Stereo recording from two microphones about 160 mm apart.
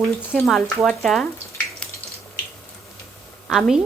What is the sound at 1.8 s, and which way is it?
Water, 5° left (ahead or behind).